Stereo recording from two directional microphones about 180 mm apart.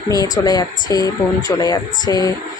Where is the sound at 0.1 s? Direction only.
20° left (ahead or behind).